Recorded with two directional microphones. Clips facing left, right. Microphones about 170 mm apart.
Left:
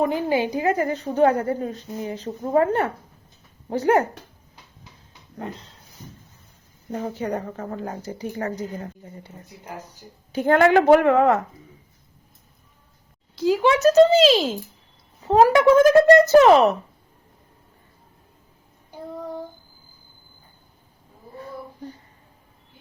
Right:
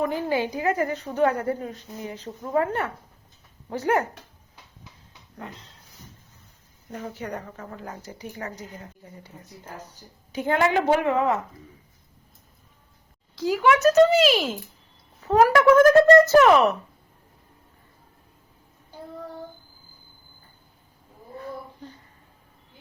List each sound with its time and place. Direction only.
0.0 s speech: 20° left (ahead or behind)
0.5 s a woman's voice: 30° left (ahead or behind)
6.9 s a woman's voice: 30° left (ahead or behind)
10.3 s a woman's voice: 55° left (ahead or behind)
13.3 s speech: 25° left (ahead or behind)
18.9 s child singing: 15° left (ahead or behind)